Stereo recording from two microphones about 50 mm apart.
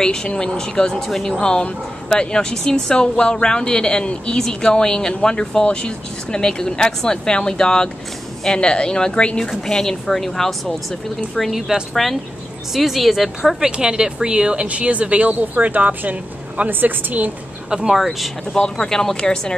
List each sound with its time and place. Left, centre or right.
0.0 s a woman's voice: centre
11.9 s speech: centre
13.7 s a woman's voice: centre; by 17.3 s right
17.6 s speech: centre
18.5 s a woman's voice: centre